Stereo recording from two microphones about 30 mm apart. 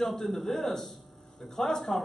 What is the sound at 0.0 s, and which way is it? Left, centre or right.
A man's voice, centre.